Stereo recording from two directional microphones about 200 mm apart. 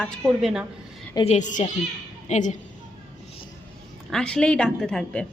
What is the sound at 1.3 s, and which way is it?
A woman's voice, 35° left (ahead or behind).